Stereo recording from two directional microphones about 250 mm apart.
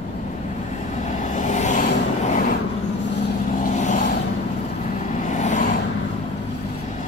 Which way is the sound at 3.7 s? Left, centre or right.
Left.